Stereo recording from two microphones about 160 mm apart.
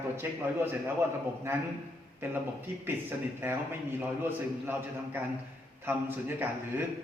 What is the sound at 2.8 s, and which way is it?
A man's voice, 15° right (ahead or behind).